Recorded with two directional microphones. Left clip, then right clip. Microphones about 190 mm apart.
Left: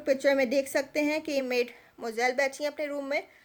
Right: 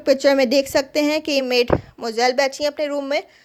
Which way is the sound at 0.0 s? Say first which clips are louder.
Right 9 dB; 35° right (ahead or behind).